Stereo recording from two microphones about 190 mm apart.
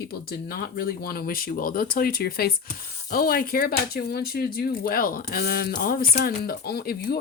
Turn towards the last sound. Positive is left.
turn(degrees=55)  # may be behind; listen again after turning